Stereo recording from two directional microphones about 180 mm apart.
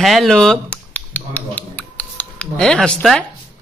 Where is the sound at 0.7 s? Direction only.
10° left (ahead or behind).